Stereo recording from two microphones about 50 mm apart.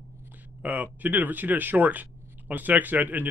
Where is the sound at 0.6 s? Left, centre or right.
Right.